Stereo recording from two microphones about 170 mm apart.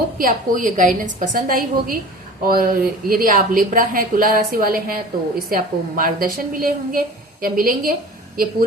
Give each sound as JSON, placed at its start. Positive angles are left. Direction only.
{"t": 0.2, "sound": "a woman's voice", "side_deg": -55}